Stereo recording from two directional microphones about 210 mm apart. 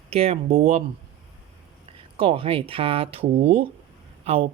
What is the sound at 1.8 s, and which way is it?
Speech, 25° right (ahead or behind).